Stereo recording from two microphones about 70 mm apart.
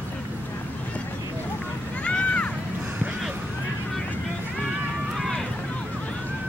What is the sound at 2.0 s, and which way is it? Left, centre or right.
Run, centre.